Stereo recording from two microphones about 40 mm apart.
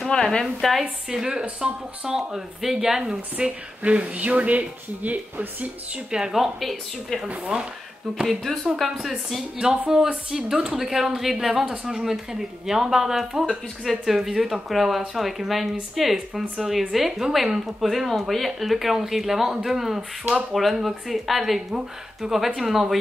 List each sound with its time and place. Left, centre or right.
0.1 s speech: centre
1.1 s speech: centre
3.0 s speech: right
6.1 s speech: right
6.6 s speech: centre
7.5 s speech: centre
8.3 s speech: centre
9.6 s speech: centre
10.8 s speech: centre
20.0 s speech: right
20.5 s speech: centre